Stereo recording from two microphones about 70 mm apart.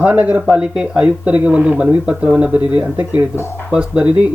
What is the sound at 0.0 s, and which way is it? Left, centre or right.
Speech, right.